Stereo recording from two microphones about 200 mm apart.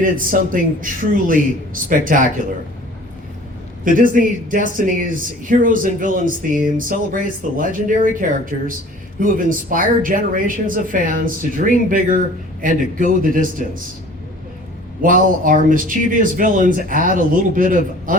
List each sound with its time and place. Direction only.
0.0 s speech: 45° right (ahead or behind)
3.8 s speech: 40° right (ahead or behind)
15.0 s speech: 45° right (ahead or behind)